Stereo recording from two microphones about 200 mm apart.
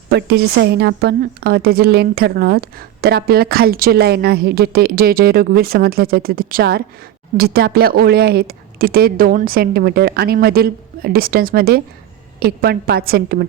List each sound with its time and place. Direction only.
0.1 s a woman's voice: 55° right (ahead or behind)